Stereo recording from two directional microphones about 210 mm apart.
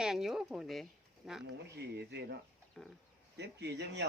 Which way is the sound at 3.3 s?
55° right (ahead or behind).